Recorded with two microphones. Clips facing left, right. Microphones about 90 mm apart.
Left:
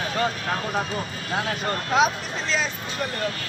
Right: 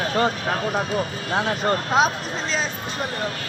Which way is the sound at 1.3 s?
30° right (ahead or behind).